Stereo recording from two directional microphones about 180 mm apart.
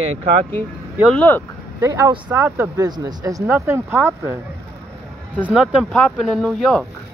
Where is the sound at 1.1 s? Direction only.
10° left (ahead or behind).